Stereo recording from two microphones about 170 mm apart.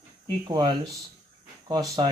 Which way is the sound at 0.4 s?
25° right (ahead or behind).